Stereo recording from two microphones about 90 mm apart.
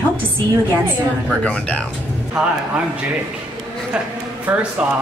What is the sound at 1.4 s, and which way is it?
Speech, 15° left (ahead or behind).